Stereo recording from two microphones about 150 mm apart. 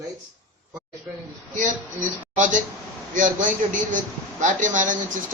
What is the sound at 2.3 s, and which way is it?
A man's voice, 55° right (ahead or behind).